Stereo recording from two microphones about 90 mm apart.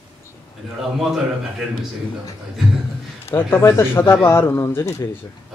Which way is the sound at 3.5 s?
30° left (ahead or behind).